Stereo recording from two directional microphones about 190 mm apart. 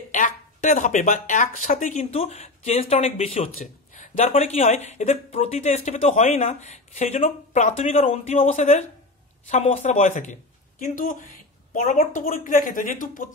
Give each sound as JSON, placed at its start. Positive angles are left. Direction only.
{"t": 0.1, "sound": "a woman's voice", "side_deg": 40}